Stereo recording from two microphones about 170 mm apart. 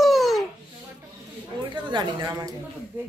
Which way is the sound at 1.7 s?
25° right (ahead or behind).